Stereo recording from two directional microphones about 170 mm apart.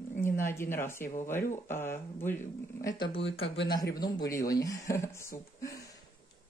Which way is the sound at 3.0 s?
35° left (ahead or behind).